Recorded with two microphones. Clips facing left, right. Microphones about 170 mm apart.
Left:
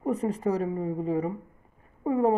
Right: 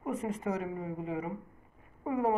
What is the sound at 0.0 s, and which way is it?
Speech, 35° left (ahead or behind).